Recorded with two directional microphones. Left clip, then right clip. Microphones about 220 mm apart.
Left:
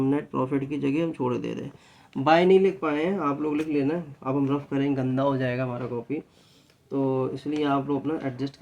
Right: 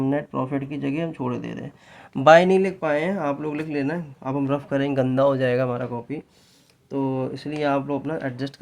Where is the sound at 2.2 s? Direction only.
50° right (ahead or behind).